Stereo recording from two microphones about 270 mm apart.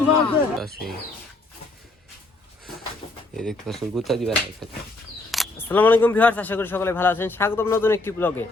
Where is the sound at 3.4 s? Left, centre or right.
Centre.